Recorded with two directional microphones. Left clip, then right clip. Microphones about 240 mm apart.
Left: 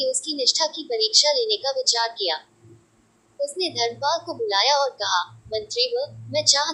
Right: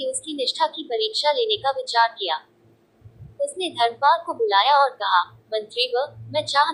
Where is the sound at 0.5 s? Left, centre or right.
Centre.